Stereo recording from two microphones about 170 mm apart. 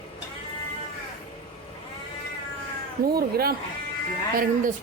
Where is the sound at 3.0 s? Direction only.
65° right (ahead or behind).